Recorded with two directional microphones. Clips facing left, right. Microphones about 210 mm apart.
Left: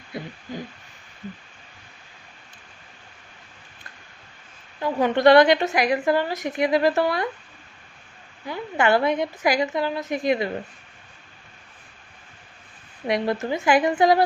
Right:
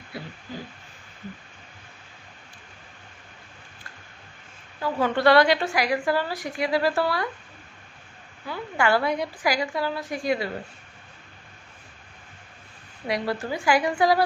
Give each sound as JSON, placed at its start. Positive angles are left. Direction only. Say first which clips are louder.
{"t": 0.1, "sound": "a sound", "louder": "left 4 dB", "side_deg": 20}
{"t": 4.8, "sound": "a woman's voice", "louder": "left 3 dB", "side_deg": 20}
{"t": 8.4, "sound": "a woman's voice", "louder": "left 2 dB", "side_deg": 20}
{"t": 13.1, "sound": "a woman's voice", "louder": "left 4 dB", "side_deg": 20}